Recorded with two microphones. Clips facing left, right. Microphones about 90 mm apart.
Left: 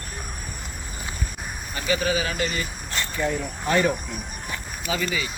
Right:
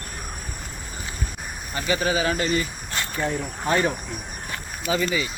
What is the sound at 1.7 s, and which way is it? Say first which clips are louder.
Speech: right 1 dB; 30° right (ahead or behind).